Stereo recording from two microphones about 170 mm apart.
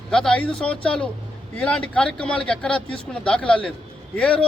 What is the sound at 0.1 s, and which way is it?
A man's voice, 5° left (ahead or behind).